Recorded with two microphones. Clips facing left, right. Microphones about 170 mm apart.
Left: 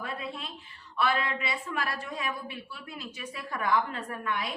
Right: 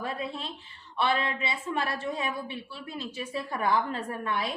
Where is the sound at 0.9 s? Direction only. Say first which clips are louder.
Right 1 dB; 25° right (ahead or behind).